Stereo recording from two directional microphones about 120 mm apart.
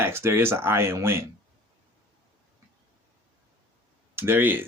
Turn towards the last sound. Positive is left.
turn(degrees=-15)  # may be behind; listen again after turning